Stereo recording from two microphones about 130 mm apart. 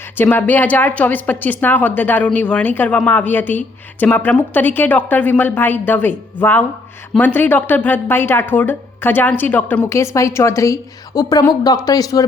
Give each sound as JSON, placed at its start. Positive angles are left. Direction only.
{"t": 0.2, "sound": "a woman's voice", "side_deg": 15}